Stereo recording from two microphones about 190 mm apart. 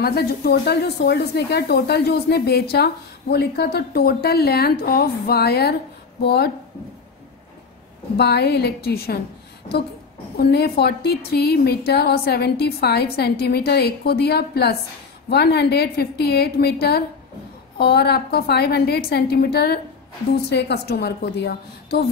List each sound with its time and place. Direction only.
0.0 s a woman's voice: 55° left (ahead or behind)
8.2 s a woman's voice: 60° left (ahead or behind)
10.3 s a woman's voice: 55° left (ahead or behind)